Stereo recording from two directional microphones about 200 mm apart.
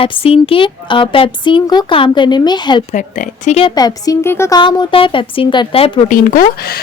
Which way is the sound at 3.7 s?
20° left (ahead or behind).